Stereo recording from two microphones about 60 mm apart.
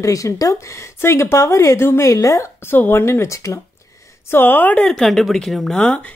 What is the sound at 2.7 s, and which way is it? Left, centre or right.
Speech, left.